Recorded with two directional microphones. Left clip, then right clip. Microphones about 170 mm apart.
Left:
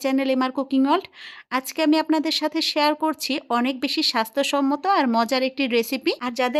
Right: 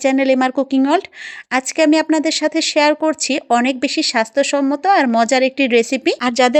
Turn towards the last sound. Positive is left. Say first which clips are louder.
# right 8 dB
turn(degrees=-25)  # may be behind; listen again after turning